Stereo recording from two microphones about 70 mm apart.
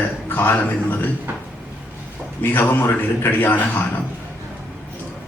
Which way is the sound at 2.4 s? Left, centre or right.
Left.